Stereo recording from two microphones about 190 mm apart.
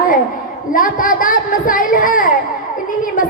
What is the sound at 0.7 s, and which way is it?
A woman's voice, 45° left (ahead or behind).